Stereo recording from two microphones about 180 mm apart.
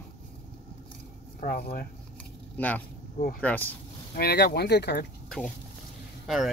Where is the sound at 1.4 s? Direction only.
50° left (ahead or behind).